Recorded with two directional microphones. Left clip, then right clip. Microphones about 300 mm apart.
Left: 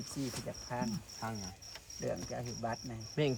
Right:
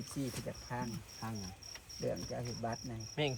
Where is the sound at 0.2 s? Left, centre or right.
Centre.